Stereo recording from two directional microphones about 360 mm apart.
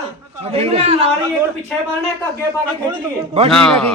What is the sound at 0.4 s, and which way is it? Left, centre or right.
Speech, centre.